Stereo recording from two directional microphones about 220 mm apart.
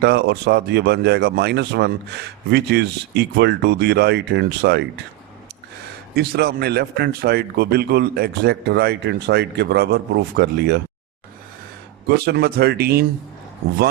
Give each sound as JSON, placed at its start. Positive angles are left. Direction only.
{"t": 0.0, "sound": "speech", "side_deg": -50}
{"t": 6.1, "sound": "speech", "side_deg": -45}
{"t": 12.0, "sound": "speech", "side_deg": -45}